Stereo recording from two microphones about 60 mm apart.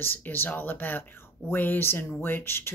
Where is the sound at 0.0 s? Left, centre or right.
Left.